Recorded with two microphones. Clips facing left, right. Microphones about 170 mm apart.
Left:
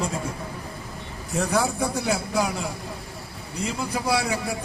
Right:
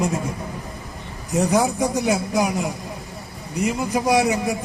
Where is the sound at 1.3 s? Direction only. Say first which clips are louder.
Right 5 dB; 15° right (ahead or behind).